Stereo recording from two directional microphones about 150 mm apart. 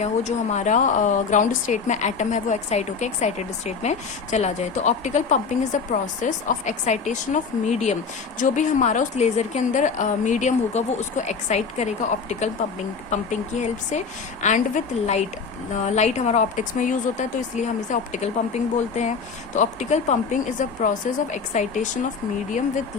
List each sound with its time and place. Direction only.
0.0 s a woman's voice: 50° left (ahead or behind)